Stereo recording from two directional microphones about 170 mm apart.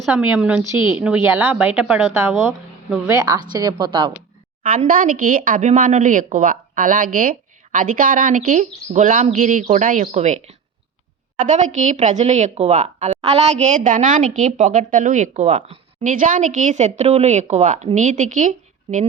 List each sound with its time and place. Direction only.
0.0 s a woman's voice: 5° right (ahead or behind); by 4.1 s 30° right (ahead or behind)
4.6 s speech: 55° right (ahead or behind)
16.1 s speech: 50° right (ahead or behind)